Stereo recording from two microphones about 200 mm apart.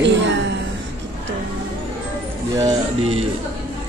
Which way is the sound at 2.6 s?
30° right (ahead or behind).